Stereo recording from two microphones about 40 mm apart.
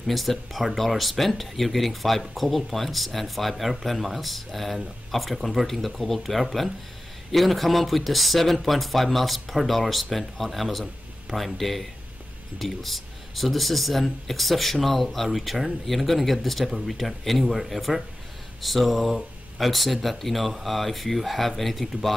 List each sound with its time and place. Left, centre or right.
0.0 s speech: centre